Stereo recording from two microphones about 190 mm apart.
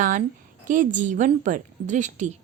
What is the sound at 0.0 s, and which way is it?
A woman's voice, 45° right (ahead or behind).